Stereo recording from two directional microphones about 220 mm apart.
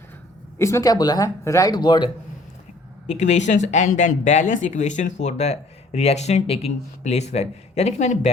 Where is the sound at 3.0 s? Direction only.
30° left (ahead or behind).